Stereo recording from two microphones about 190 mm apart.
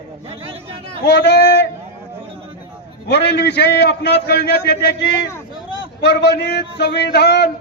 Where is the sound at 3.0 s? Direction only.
60° left (ahead or behind).